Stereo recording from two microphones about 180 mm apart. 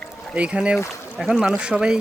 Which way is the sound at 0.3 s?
5° right (ahead or behind).